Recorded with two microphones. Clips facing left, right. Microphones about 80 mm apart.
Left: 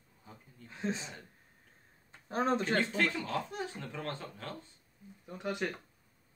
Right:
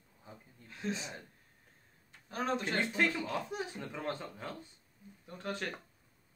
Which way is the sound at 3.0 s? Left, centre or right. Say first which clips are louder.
Even; centre.